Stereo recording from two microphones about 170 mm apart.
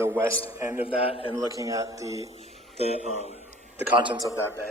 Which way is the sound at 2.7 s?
40° left (ahead or behind).